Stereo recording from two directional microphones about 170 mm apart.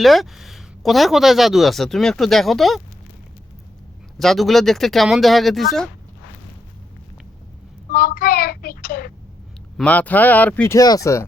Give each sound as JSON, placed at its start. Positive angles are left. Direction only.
{"t": 0.0, "sound": "speech", "side_deg": 0}
{"t": 4.2, "sound": "speech", "side_deg": 0}
{"t": 7.9, "sound": "child singing", "side_deg": 60}
{"t": 9.7, "sound": "speech", "side_deg": 10}